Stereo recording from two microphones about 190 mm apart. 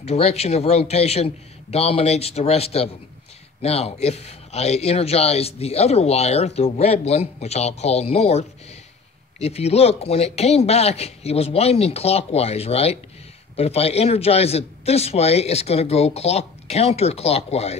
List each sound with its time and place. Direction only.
0.0 s a man's voice: 35° left (ahead or behind)